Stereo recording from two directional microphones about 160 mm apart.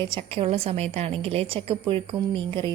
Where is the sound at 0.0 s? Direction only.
35° right (ahead or behind).